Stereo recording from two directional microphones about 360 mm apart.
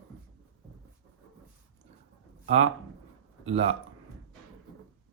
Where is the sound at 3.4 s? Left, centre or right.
Centre.